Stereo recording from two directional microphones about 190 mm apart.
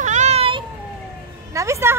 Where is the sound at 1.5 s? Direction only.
15° right (ahead or behind).